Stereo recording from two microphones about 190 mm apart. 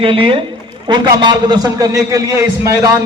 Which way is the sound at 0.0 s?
30° right (ahead or behind).